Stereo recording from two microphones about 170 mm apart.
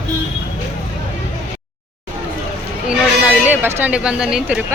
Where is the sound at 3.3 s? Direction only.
10° right (ahead or behind).